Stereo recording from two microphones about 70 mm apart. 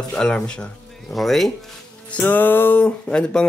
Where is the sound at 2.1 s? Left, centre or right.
Left.